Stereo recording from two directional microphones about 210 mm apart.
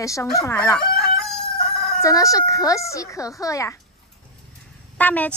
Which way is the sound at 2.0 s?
15° left (ahead or behind).